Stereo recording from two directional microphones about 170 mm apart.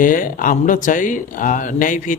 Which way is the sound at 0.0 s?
50° left (ahead or behind).